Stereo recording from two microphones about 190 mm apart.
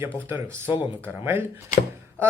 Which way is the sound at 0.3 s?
10° right (ahead or behind).